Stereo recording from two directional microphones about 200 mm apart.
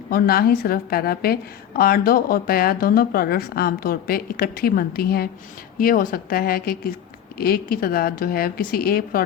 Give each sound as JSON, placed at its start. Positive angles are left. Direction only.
{"t": 0.1, "sound": "a woman's voice", "side_deg": 50}